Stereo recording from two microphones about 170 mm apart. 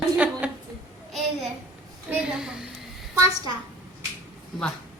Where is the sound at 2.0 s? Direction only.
5° right (ahead or behind).